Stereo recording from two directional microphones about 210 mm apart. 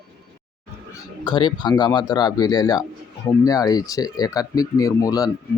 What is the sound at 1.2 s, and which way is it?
A man's voice, 20° left (ahead or behind).